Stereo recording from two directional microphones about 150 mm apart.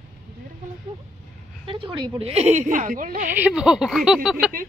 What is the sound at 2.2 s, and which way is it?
Speech, 45° right (ahead or behind).